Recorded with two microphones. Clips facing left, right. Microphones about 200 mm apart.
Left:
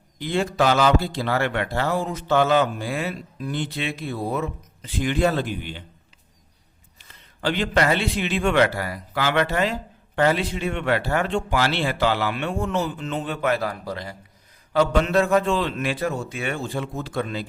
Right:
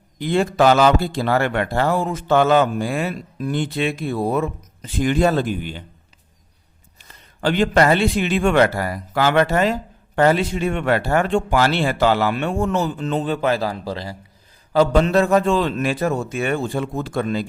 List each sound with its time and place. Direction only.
0.2 s a man's voice: 50° right (ahead or behind)
7.0 s a man's voice: 50° right (ahead or behind)